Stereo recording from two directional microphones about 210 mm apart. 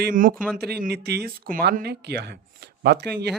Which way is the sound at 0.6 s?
50° right (ahead or behind).